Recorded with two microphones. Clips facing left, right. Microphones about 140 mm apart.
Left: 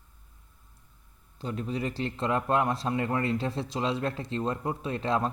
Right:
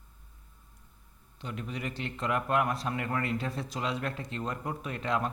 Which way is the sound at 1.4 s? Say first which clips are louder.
Left 6 dB; 35° left (ahead or behind).